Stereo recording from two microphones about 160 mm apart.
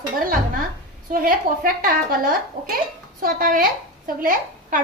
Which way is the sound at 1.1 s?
60° right (ahead or behind).